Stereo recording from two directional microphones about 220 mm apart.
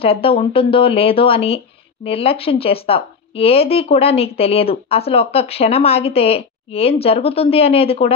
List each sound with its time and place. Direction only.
0.0 s speech: 25° left (ahead or behind)